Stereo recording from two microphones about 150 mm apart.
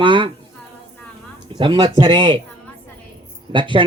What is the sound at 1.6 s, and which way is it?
Speech, 30° right (ahead or behind).